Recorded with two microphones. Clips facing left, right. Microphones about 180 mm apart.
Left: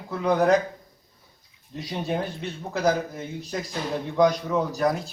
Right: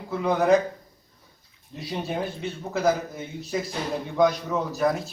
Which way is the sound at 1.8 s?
5° right (ahead or behind).